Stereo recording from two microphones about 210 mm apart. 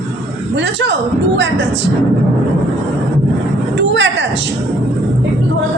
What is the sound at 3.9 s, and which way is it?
Speech, 60° right (ahead or behind).